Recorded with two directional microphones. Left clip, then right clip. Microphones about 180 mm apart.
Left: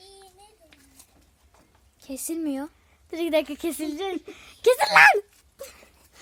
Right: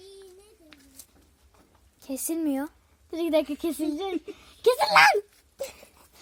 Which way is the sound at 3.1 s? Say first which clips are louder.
Left 1 dB; 15° left (ahead or behind).